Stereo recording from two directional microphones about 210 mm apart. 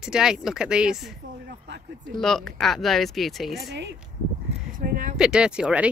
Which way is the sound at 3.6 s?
55° right (ahead or behind).